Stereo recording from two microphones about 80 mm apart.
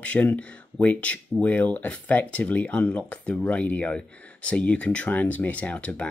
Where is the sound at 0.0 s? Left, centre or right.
Centre.